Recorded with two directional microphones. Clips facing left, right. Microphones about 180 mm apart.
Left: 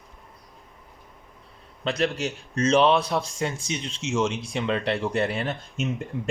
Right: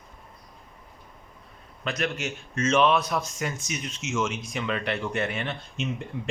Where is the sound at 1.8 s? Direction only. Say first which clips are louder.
Left 4 dB; 30° left (ahead or behind).